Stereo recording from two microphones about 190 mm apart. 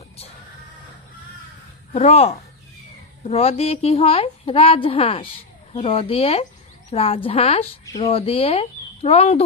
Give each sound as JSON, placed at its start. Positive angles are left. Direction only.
{"t": 1.9, "sound": "a woman's voice", "side_deg": 35}